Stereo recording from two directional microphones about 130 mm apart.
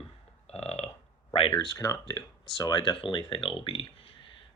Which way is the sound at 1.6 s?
25° left (ahead or behind).